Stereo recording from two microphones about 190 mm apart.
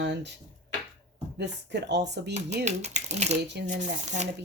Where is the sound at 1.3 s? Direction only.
65° right (ahead or behind).